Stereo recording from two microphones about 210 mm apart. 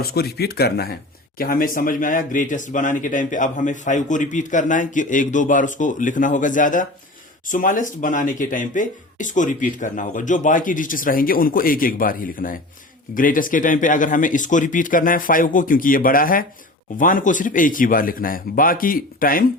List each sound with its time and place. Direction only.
0.0 s speech: 50° left (ahead or behind)